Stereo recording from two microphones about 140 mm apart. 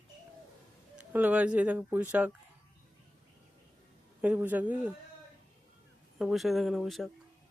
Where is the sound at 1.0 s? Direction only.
10° right (ahead or behind).